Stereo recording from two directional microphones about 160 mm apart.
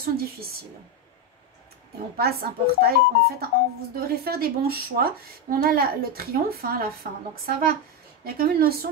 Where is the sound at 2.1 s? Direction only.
75° right (ahead or behind).